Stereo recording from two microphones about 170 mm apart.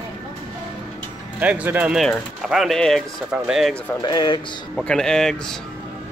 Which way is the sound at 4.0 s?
25° left (ahead or behind).